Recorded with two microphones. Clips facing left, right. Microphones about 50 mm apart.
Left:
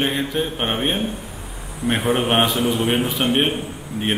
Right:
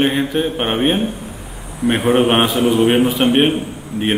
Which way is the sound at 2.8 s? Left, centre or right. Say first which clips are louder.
Right 7 dB; right.